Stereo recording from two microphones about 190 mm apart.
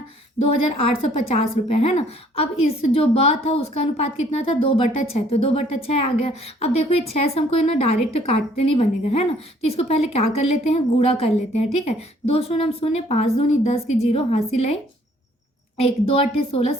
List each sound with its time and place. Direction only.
0.4 s a woman's voice: 30° left (ahead or behind)
15.8 s a woman's voice: 30° left (ahead or behind)